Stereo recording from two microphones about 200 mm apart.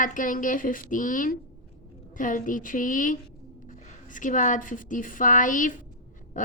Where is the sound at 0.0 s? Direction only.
40° left (ahead or behind).